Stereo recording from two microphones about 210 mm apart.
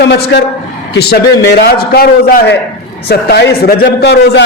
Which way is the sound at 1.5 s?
45° left (ahead or behind).